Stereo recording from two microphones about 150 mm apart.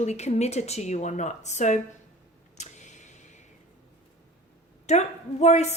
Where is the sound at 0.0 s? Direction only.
50° left (ahead or behind).